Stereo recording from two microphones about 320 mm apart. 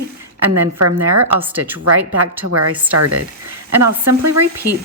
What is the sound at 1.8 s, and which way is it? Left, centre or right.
Speech, right.